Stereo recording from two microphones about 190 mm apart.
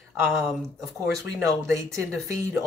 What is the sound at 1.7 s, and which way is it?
Speech, 15° right (ahead or behind).